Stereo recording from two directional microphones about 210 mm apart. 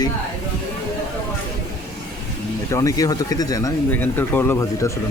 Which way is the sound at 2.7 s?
15° left (ahead or behind).